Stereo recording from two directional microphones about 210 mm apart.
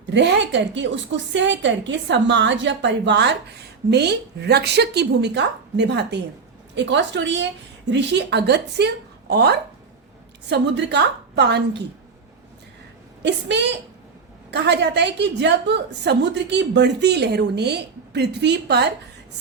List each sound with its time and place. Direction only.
0.1 s a woman's voice: 55° right (ahead or behind)
13.2 s a woman's voice: 55° right (ahead or behind)